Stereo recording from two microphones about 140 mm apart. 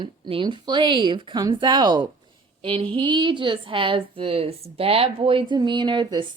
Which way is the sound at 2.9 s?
35° right (ahead or behind).